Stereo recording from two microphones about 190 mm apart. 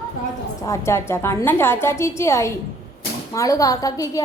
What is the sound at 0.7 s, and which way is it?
A woman's voice, 15° left (ahead or behind).